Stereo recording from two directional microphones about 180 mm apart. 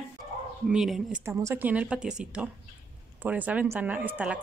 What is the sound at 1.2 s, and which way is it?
A woman's voice, 15° right (ahead or behind).